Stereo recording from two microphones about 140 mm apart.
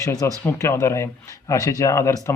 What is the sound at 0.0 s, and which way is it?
Speech, 25° left (ahead or behind).